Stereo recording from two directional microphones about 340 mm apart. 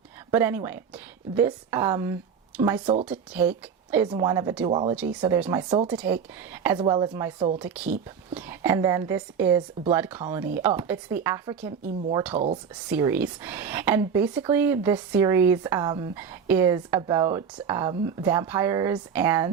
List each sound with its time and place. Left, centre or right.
0.3 s speech: centre
3.1 s speech: centre
12.9 s speech: centre